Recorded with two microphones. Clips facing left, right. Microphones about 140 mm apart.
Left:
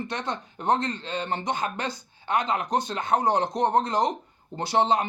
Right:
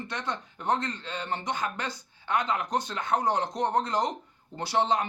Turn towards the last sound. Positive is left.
turn(degrees=20)  # may be behind; listen again after turning